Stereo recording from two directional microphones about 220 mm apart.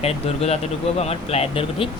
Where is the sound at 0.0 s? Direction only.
30° left (ahead or behind).